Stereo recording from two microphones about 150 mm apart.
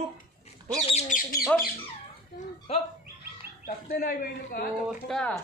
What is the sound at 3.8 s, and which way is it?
Speech, 80° left.